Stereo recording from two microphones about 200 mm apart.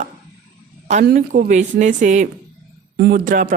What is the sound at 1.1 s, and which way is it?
A woman's voice, 40° right (ahead or behind).